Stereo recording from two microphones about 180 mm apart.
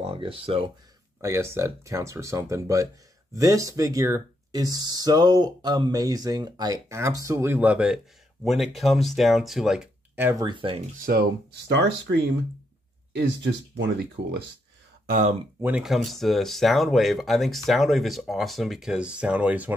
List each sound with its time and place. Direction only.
0.0 s speech: 30° right (ahead or behind)
1.2 s speech: 15° right (ahead or behind)
10.4 s speech: 25° right (ahead or behind)
11.0 s speech: 55° right (ahead or behind); by 12.2 s 75° right (ahead or behind)
13.1 s speech: 85° right
15.0 s speech: 45° right (ahead or behind)
15.6 s speech: 5° right (ahead or behind)